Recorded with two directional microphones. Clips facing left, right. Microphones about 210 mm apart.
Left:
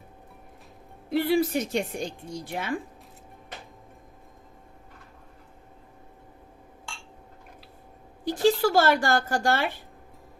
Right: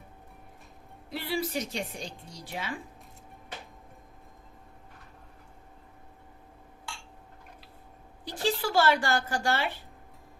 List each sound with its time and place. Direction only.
1.1 s a woman's voice: 50° left (ahead or behind)
8.2 s a woman's voice: 45° left (ahead or behind)